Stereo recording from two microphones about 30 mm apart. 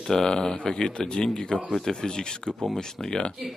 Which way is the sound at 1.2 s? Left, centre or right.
Centre.